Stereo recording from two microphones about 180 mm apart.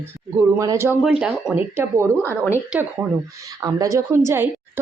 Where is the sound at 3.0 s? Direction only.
5° right (ahead or behind).